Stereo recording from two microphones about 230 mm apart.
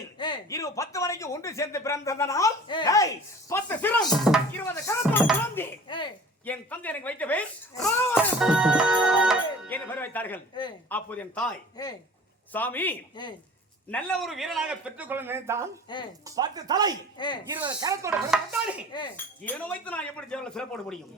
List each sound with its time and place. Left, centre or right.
0.2 s speech: centre
8.1 s music: centre
9.6 s speech: centre
10.5 s chink: centre
10.8 s speech: centre
11.8 s a man's voice: centre
17.2 s chink: centre
17.5 s speech: centre
18.3 s a man's voice: centre
18.9 s chink: centre
19.5 s a man's voice: centre